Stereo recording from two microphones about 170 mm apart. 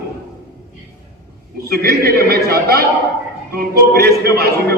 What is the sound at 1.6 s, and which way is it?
A man's voice, 65° right (ahead or behind).